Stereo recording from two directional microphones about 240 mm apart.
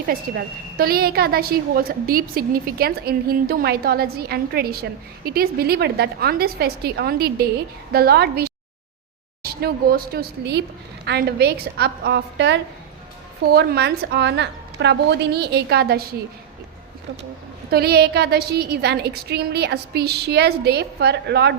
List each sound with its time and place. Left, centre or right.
0.1 s a woman's voice: right
17.7 s a woman's voice: right